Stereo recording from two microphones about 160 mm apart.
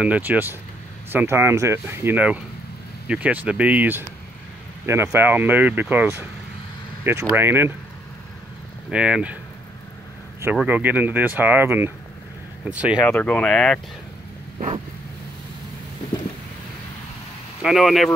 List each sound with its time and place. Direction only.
0.0 s speech: 10° right (ahead or behind)
8.9 s speech: 5° right (ahead or behind)
10.4 s speech: 10° right (ahead or behind)
13.0 s speech: 10° left (ahead or behind)
17.6 s speech: centre (ahead or behind)